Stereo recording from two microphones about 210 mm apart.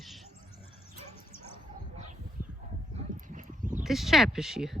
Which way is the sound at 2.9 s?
30° right (ahead or behind).